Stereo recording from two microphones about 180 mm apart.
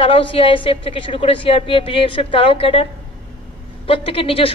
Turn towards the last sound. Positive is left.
turn(degrees=30)  # may be behind; listen again after turning